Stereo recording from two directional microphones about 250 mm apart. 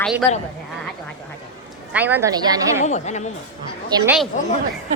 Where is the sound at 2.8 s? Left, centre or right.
Left.